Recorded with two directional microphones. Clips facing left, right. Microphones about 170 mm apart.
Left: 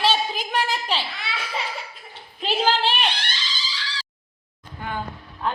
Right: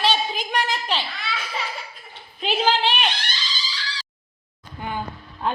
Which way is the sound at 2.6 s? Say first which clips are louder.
Even; centre (ahead or behind).